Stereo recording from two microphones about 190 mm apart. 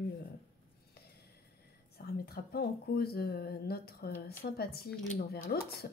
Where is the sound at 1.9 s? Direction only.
55° left (ahead or behind).